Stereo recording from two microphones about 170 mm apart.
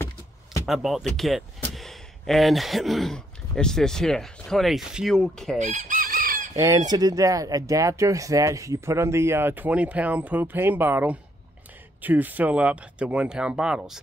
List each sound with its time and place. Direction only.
0.0 s door: 20° left (ahead or behind)
0.7 s speech: centre (ahead or behind)
5.6 s chicken: 45° right (ahead or behind)
6.5 s chicken: 20° right (ahead or behind)
6.9 s speech: 20° right (ahead or behind); by 14.0 s 5° right (ahead or behind)